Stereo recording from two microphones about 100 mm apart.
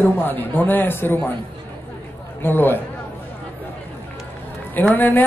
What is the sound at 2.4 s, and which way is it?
Speech, 20° left (ahead or behind).